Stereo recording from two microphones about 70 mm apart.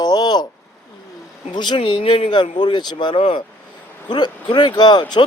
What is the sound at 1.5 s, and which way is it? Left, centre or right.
Speech, left.